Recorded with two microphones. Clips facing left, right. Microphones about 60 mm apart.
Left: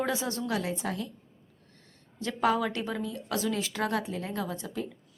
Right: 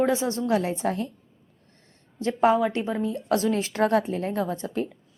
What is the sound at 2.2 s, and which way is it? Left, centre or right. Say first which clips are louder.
Speech: right 6 dB; right.